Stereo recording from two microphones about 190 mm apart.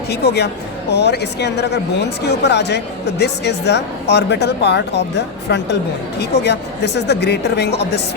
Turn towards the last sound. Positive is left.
turn(degrees=60)  # may be behind; listen again after turning